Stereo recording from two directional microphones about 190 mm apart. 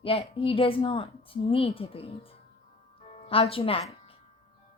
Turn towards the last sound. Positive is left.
turn(degrees=30)  # may be behind; listen again after turning